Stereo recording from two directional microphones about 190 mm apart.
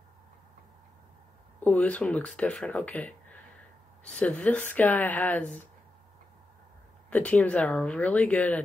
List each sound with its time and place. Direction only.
1.6 s speech: 10° left (ahead or behind)
7.1 s speech: 5° left (ahead or behind)